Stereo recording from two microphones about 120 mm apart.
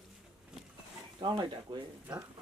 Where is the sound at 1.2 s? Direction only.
35° right (ahead or behind).